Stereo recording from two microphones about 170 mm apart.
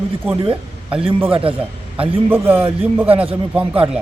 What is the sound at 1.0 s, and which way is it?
Speech, 35° right (ahead or behind).